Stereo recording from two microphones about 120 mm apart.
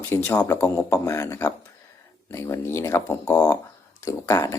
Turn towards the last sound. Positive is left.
turn(degrees=25)  # may be behind; listen again after turning